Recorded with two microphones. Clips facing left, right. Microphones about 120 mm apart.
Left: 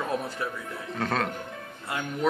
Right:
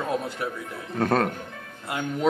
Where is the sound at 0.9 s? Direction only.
45° right (ahead or behind).